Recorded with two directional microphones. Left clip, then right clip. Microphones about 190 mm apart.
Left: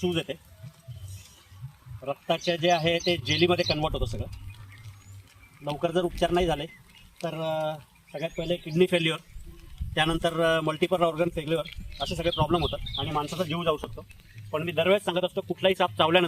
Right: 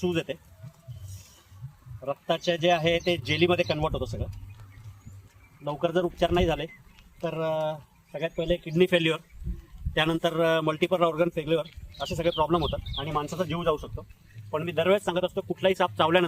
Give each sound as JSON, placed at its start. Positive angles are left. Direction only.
{"t": 0.0, "sound": "speech", "side_deg": -5}
{"t": 2.0, "sound": "speech", "side_deg": -5}
{"t": 5.8, "sound": "a man's voice", "side_deg": -10}
{"t": 7.7, "sound": "speech", "side_deg": -10}
{"t": 8.7, "sound": "a man's voice", "side_deg": -25}